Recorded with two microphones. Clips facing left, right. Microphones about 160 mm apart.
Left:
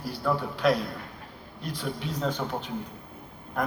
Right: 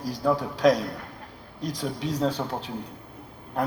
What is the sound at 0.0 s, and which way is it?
A man's voice, 40° right (ahead or behind).